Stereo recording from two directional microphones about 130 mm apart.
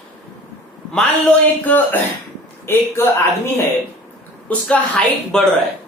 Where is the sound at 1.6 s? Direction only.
15° left (ahead or behind).